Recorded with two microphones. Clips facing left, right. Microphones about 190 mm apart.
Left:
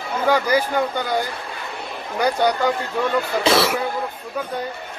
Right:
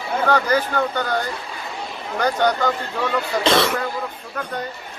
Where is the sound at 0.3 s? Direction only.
10° left (ahead or behind).